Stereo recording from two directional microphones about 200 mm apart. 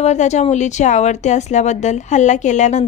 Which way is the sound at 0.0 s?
35° left (ahead or behind).